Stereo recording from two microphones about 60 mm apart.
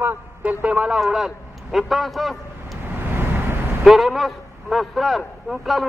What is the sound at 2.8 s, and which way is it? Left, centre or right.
Vehicle, right.